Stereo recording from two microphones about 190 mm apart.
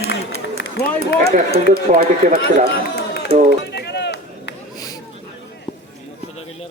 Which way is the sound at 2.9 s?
65° left (ahead or behind).